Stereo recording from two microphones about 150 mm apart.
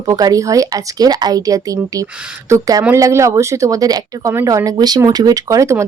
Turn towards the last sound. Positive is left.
turn(degrees=-20)  # may be behind; listen again after turning